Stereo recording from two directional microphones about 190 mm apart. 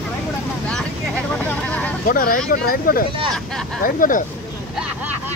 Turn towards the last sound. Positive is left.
turn(degrees=45)  # may be behind; listen again after turning